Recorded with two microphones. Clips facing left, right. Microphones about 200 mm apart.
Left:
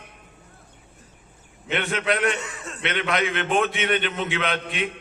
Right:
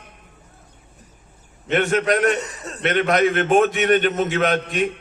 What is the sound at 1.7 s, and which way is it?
A man's voice, 45° right (ahead or behind).